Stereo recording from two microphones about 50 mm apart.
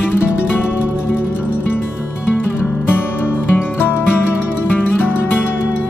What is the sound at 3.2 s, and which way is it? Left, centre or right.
Music, left.